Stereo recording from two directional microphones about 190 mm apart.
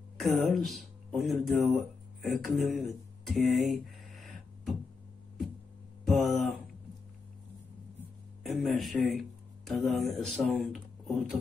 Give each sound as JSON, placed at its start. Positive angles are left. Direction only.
{"t": 0.2, "sound": "speech", "side_deg": 0}
{"t": 6.0, "sound": "a sound", "side_deg": 0}
{"t": 8.5, "sound": "a man's voice", "side_deg": 0}